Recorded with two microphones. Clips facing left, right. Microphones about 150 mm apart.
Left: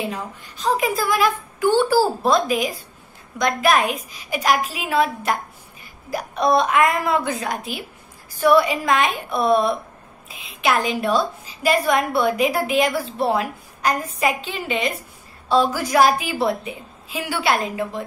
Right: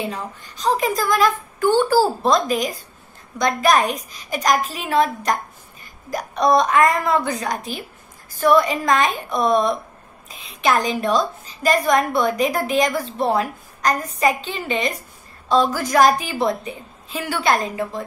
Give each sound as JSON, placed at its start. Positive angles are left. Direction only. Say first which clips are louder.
{"t": 0.0, "sound": "a woman's voice", "louder": "even", "side_deg": 5}
{"t": 3.8, "sound": "a woman's voice", "louder": "even", "side_deg": -40}
{"t": 4.3, "sound": "a woman's voice", "louder": "right 1 dB", "side_deg": 10}
{"t": 8.3, "sound": "a sound", "louder": "even", "side_deg": 10}
{"t": 8.8, "sound": "a woman's voice", "louder": "right 1 dB", "side_deg": 5}
{"t": 10.9, "sound": "a woman's voice", "louder": "right 1 dB", "side_deg": 5}